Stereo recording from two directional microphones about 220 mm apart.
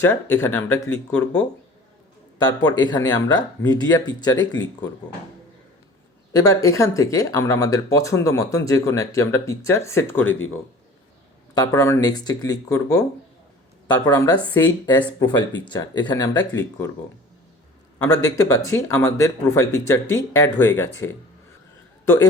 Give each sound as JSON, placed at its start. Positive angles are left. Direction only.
{"t": 0.0, "sound": "speech", "side_deg": 10}
{"t": 2.4, "sound": "speech", "side_deg": 20}
{"t": 6.3, "sound": "speech", "side_deg": 15}
{"t": 11.5, "sound": "speech", "side_deg": 15}
{"t": 18.0, "sound": "speech", "side_deg": 15}